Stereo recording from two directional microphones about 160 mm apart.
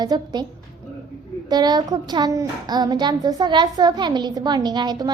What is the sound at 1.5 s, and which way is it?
A child's voice, 25° right (ahead or behind).